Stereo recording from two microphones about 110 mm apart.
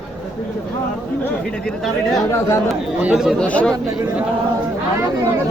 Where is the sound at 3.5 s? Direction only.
10° left (ahead or behind).